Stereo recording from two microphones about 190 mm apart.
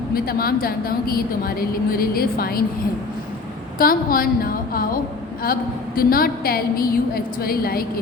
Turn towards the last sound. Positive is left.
turn(degrees=50)  # may be behind; listen again after turning